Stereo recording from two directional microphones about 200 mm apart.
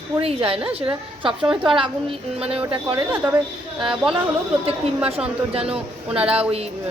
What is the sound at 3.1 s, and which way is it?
Speech, 10° right (ahead or behind).